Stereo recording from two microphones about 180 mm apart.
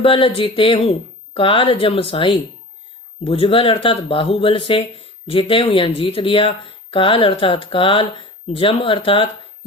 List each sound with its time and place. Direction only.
0.0 s speech: 30° left (ahead or behind)